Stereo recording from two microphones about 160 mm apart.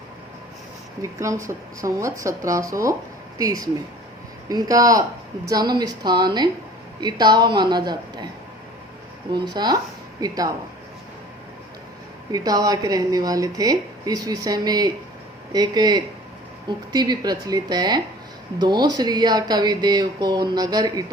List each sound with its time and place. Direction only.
1.0 s speech: 20° right (ahead or behind)
9.3 s speech: 25° right (ahead or behind)
12.3 s speech: 25° right (ahead or behind)